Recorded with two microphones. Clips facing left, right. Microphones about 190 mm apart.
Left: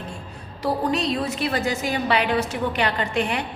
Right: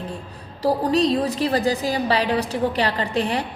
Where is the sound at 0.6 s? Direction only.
35° right (ahead or behind).